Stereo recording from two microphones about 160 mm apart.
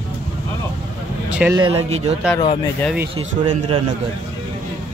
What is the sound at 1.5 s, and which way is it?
Speech, 30° right (ahead or behind).